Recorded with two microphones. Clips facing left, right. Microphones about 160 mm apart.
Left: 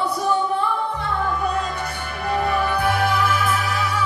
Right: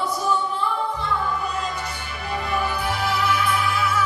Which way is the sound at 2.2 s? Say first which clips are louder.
Left 4 dB; 55° left (ahead or behind).